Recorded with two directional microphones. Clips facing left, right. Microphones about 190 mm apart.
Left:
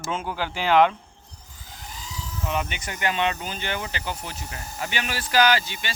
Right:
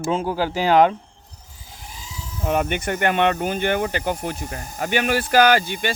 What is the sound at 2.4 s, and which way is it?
Speech, 50° right (ahead or behind).